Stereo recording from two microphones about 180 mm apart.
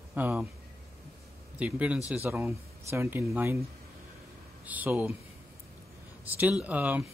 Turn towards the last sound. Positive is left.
turn(degrees=-10)  # may be behind; listen again after turning